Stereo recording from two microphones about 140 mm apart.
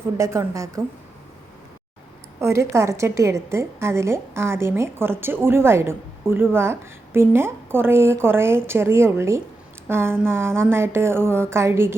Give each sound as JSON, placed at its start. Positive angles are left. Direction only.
{"t": 0.2, "sound": "a woman's voice", "side_deg": -20}
{"t": 2.4, "sound": "a woman's voice", "side_deg": -20}